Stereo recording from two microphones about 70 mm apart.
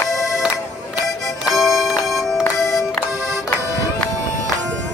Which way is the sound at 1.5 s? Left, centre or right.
Centre.